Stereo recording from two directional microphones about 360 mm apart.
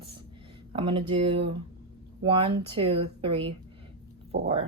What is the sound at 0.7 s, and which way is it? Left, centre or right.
Speech, centre.